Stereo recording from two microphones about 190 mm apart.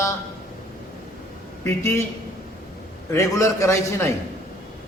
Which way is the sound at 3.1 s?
15° left (ahead or behind).